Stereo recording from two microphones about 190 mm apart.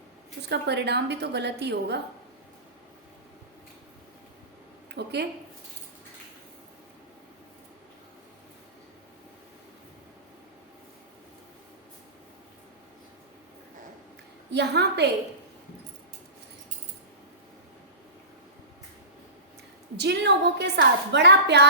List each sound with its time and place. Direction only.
0.4 s a woman's voice: 60° right (ahead or behind)
5.0 s a sound: 60° right (ahead or behind)
14.5 s a woman's voice: 60° right (ahead or behind)
20.0 s a woman's voice: 65° right (ahead or behind)